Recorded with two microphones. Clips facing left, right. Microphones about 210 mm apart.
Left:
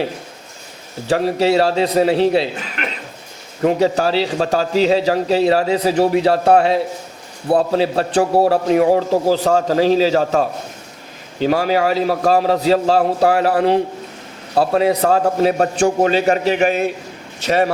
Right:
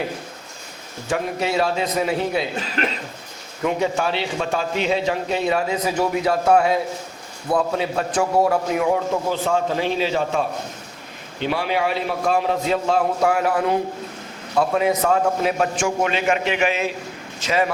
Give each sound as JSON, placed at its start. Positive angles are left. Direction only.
{"t": 1.0, "sound": "a man's voice", "side_deg": 35}
{"t": 2.8, "sound": "a sound", "side_deg": -35}
{"t": 3.6, "sound": "a man's voice", "side_deg": 35}
{"t": 17.4, "sound": "speech", "side_deg": 65}